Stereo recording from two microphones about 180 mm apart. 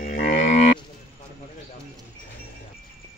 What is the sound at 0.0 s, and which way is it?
Livestock, 50° left (ahead or behind).